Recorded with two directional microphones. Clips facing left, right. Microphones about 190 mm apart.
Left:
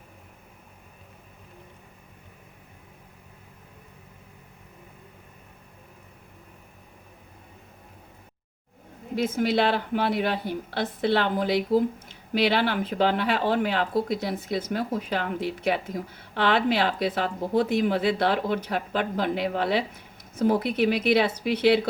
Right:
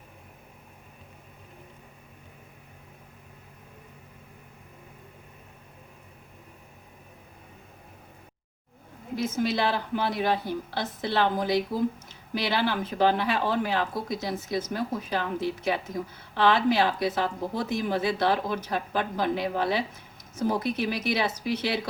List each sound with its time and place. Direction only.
9.1 s speech: 60° left (ahead or behind)